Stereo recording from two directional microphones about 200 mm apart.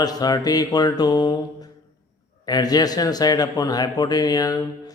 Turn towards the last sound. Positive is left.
turn(degrees=20)  # may be behind; listen again after turning